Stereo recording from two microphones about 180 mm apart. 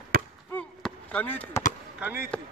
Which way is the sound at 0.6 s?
10° left (ahead or behind).